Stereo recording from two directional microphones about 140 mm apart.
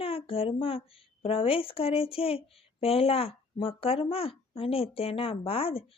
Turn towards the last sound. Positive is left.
turn(degrees=45)  # may be behind; listen again after turning